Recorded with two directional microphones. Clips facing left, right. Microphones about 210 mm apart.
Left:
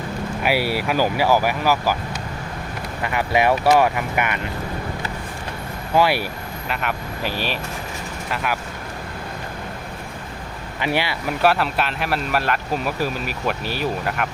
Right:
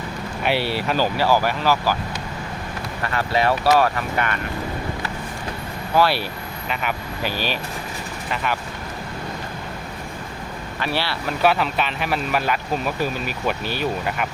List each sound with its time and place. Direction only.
0.4 s speech: 10° left (ahead or behind)
3.0 s speech: 15° left (ahead or behind)
5.9 s speech: 15° left (ahead or behind)
6.7 s speech: centre (ahead or behind)
10.8 s speech: 15° left (ahead or behind)
11.4 s speech: centre (ahead or behind)